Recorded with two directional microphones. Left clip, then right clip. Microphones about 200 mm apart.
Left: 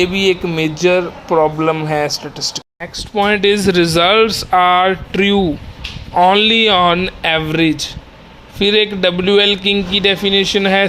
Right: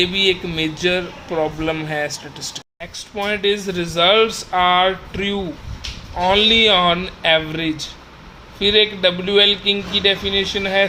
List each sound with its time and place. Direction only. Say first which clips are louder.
0.0 s speech: left 3 dB; 25° left (ahead or behind)
3.2 s speech: left 7 dB; 45° left (ahead or behind)